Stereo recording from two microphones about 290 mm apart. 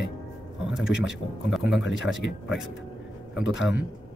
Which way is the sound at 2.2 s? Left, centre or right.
Left.